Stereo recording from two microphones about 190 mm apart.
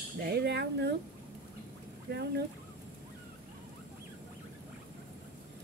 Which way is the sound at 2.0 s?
60° right (ahead or behind).